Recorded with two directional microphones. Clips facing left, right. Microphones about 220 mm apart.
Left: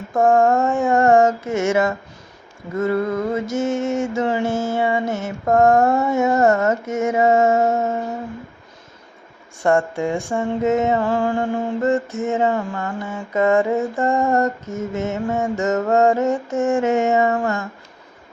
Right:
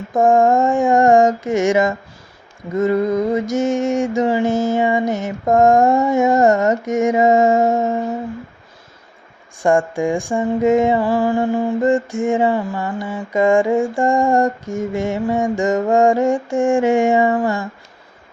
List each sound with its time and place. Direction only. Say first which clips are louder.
0.1 s female singing: right 2 dB; 15° right (ahead or behind)
9.6 s female singing: right 2 dB; 15° right (ahead or behind)